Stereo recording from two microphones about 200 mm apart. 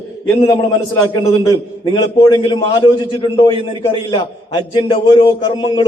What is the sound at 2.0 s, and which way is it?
A man's voice, 20° left (ahead or behind).